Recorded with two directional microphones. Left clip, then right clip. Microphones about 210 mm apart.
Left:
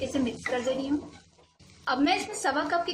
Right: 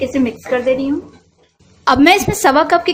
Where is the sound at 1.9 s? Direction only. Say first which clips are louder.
Right 16 dB; 45° right (ahead or behind).